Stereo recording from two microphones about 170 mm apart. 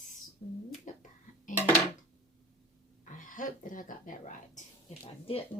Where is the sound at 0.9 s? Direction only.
45° left (ahead or behind).